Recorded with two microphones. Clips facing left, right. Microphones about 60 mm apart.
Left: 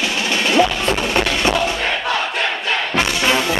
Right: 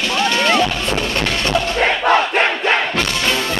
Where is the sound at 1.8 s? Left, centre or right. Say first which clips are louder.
Right 6 dB; right.